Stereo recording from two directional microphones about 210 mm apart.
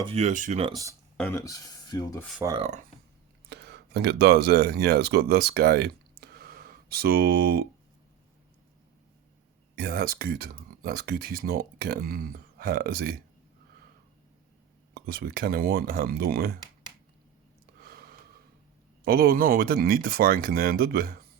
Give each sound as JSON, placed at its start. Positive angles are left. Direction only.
{"t": 0.0, "sound": "speech", "side_deg": -30}
{"t": 1.1, "sound": "speech", "side_deg": 10}
{"t": 2.4, "sound": "speech", "side_deg": -20}
{"t": 3.5, "sound": "speech", "side_deg": -50}
{"t": 9.7, "sound": "speech", "side_deg": -45}
{"t": 14.9, "sound": "speech", "side_deg": -45}
{"t": 17.8, "sound": "gasp", "side_deg": -45}
{"t": 19.0, "sound": "speech", "side_deg": -45}